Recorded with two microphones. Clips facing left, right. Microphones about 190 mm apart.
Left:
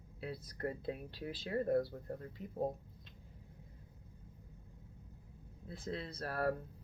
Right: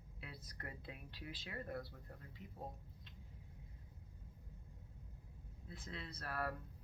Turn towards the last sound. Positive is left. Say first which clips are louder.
# left 8 dB
turn(degrees=35)  # may be behind; listen again after turning